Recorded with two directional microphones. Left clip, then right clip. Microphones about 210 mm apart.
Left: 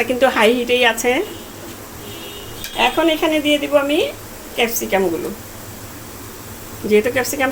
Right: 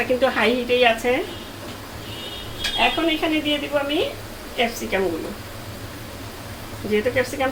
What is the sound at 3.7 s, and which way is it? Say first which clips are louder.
Speech: left 6 dB; 50° left (ahead or behind).